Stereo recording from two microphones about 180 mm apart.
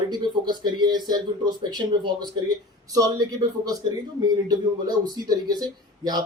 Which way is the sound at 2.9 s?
20° right (ahead or behind).